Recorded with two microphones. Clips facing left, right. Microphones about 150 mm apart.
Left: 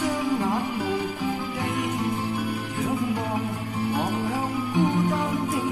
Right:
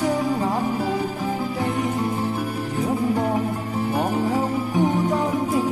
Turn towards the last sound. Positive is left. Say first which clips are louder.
# right 4 dB
turn(degrees=-35)  # may be behind; listen again after turning